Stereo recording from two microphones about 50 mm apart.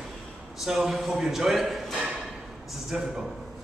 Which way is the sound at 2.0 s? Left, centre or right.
Centre.